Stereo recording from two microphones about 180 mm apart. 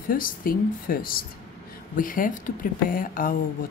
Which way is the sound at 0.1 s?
50° left (ahead or behind).